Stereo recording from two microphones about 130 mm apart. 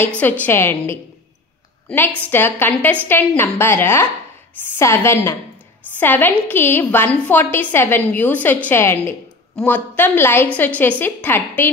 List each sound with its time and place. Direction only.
0.2 s a woman's voice: 10° left (ahead or behind)